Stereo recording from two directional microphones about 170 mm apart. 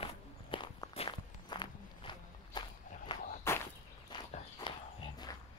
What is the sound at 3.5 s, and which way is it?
Whip, 15° left (ahead or behind).